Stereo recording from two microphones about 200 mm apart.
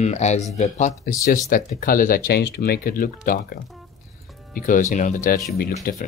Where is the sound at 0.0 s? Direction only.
35° left (ahead or behind).